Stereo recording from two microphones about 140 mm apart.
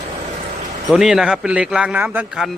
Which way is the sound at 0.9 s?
5° right (ahead or behind).